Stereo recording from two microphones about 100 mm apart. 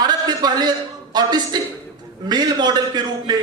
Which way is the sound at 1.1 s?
45° right (ahead or behind).